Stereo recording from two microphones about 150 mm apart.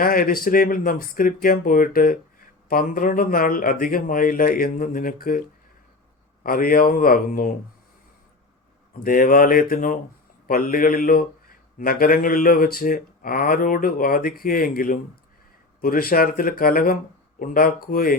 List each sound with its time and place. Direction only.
0.0 s speech: 75° left (ahead or behind)
8.9 s speech: 65° left (ahead or behind)